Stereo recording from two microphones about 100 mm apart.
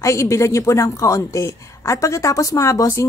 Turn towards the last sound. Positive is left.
turn(degrees=30)  # may be behind; listen again after turning